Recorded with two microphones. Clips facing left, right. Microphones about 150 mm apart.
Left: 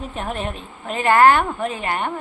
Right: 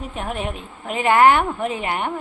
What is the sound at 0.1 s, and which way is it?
A woman's voice, 10° right (ahead or behind).